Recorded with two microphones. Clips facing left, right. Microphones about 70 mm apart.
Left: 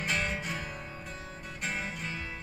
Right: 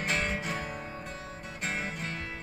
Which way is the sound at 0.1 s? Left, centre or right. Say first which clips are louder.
Right 1 dB; right.